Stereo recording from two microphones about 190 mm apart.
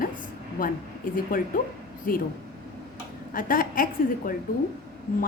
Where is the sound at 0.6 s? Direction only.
45° left (ahead or behind).